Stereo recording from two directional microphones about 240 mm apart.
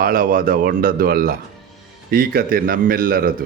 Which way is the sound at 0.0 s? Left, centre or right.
Right.